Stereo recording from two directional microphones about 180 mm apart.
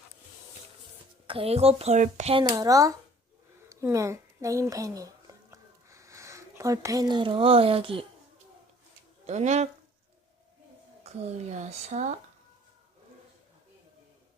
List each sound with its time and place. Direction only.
1.3 s speech: 35° right (ahead or behind)
2.4 s speech: 20° right (ahead or behind)
3.7 s a sound: 15° right (ahead or behind)
9.2 s speech: 40° right (ahead or behind)
11.0 s speech: 40° right (ahead or behind)